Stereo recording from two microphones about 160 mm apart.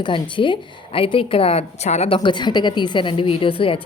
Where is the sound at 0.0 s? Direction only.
30° left (ahead or behind).